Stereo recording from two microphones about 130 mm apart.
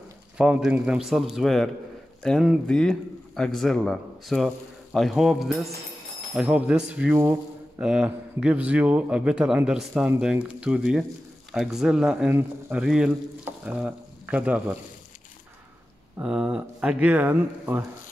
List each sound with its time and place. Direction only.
0.4 s a man's voice: 10° right (ahead or behind)
12.3 s a man's voice: 15° right (ahead or behind)
12.8 s a man's voice: 5° right (ahead or behind)
16.2 s a man's voice: 10° right (ahead or behind)